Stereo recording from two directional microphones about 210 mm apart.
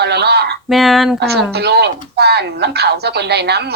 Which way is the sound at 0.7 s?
Centre (ahead or behind).